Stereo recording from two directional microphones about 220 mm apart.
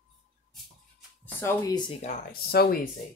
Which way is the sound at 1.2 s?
10° left (ahead or behind).